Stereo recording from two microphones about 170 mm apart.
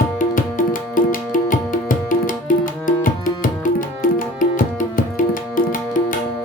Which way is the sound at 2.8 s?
50° left (ahead or behind).